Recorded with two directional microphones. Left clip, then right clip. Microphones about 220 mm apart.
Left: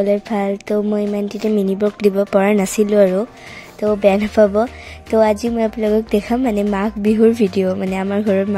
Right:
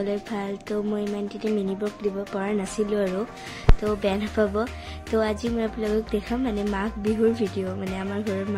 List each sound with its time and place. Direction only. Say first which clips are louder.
0.0 s speech: left 11 dB; 35° left (ahead or behind)